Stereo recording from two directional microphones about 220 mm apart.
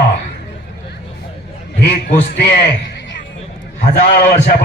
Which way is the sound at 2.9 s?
55° left (ahead or behind).